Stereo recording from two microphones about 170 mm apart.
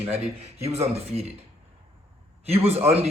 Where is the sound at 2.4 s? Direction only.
35° right (ahead or behind).